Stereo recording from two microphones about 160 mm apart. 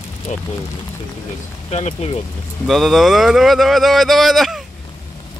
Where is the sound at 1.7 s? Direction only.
40° left (ahead or behind).